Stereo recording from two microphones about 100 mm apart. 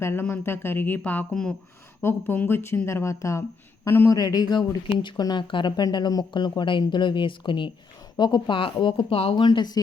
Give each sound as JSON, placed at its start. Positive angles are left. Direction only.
{"t": 0.0, "sound": "speech", "side_deg": 25}
{"t": 4.1, "sound": "speech", "side_deg": 40}
{"t": 9.3, "sound": "speech", "side_deg": 50}